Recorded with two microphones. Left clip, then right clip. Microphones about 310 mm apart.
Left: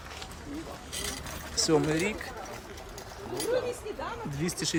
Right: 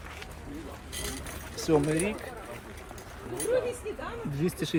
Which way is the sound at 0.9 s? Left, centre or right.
Left.